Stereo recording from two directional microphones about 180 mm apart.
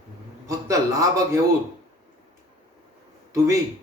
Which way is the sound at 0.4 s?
20° right (ahead or behind).